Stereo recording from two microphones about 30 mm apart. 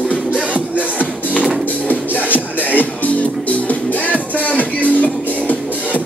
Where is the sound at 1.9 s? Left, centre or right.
Left.